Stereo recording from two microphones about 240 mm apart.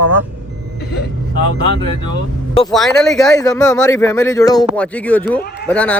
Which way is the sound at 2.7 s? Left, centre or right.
Centre.